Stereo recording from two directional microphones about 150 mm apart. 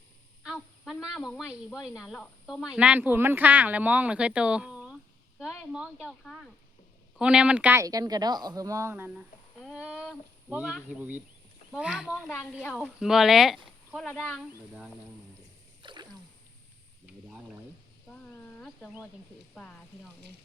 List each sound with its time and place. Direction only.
0.4 s honk: centre (ahead or behind)
1.1 s a woman's voice: centre (ahead or behind)
9.6 s a sound: centre (ahead or behind)
11.7 s speech: 5° right (ahead or behind)
15.8 s sneeze: 30° right (ahead or behind)
17.2 s a sound: 5° right (ahead or behind)
19.5 s speech: 5° left (ahead or behind)